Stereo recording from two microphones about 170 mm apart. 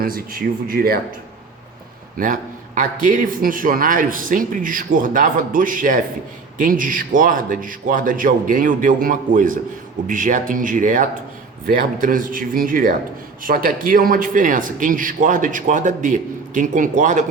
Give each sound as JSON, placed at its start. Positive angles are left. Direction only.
{"t": 0.0, "sound": "speech", "side_deg": -60}
{"t": 2.1, "sound": "a man's voice", "side_deg": -55}